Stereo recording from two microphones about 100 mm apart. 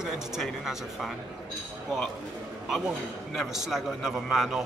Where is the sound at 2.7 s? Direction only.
Centre (ahead or behind).